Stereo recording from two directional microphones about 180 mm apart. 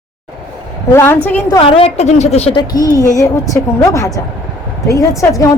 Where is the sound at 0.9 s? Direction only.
10° left (ahead or behind).